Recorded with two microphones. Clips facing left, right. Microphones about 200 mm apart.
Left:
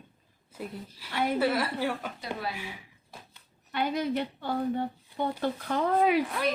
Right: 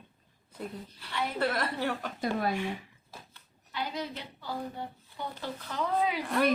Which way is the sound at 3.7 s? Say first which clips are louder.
Left 7 dB; 60° left (ahead or behind).